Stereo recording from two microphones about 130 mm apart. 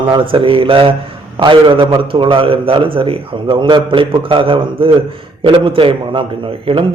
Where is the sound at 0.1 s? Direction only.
40° right (ahead or behind).